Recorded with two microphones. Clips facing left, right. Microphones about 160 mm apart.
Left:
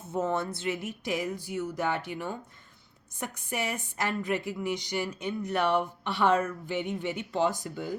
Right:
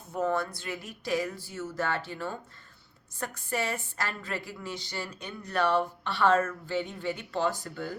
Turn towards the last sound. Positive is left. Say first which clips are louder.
# left 1 dB
turn(degrees=15)  # may be behind; listen again after turning